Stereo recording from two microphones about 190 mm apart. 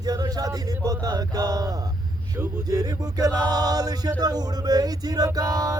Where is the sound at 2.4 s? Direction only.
20° right (ahead or behind).